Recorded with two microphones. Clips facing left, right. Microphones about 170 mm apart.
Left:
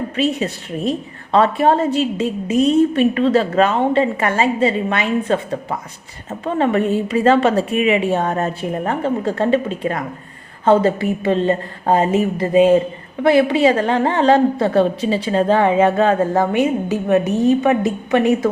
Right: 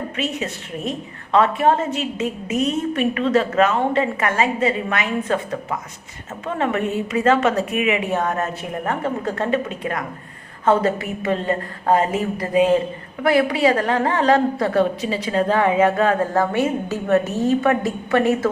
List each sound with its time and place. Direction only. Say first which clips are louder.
0.2 s a woman's voice: left 8 dB; 35° left (ahead or behind); by 18.4 s 15° left (ahead or behind)